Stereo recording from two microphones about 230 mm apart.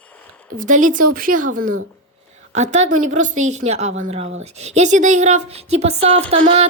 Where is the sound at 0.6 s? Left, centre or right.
Right.